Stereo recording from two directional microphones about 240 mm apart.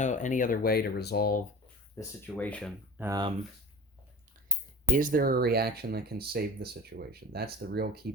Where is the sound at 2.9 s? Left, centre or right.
Centre.